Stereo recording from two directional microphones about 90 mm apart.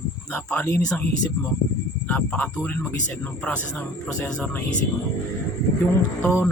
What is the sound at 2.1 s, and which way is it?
Speech, 20° left (ahead or behind).